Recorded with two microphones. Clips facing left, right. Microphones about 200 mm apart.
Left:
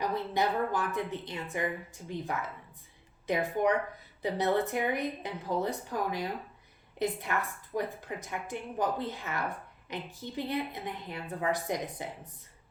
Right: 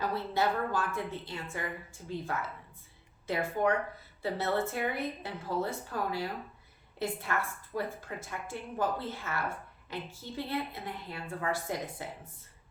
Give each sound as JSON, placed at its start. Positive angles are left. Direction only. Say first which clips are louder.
{"t": 0.0, "sound": "a woman's voice", "louder": "left 1 dB", "side_deg": 15}